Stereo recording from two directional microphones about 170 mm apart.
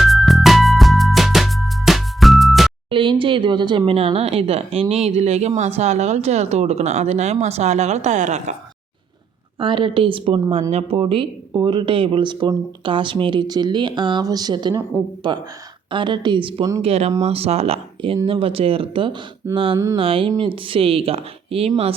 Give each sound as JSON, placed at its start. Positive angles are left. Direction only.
{"t": 0.0, "sound": "music", "side_deg": 0}
{"t": 2.9, "sound": "speech", "side_deg": -30}
{"t": 9.6, "sound": "speech", "side_deg": -30}
{"t": 10.7, "sound": "speech", "side_deg": -35}